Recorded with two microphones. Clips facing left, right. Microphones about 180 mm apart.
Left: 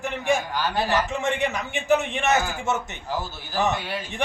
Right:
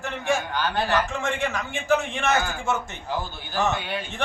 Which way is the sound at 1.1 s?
20° left (ahead or behind).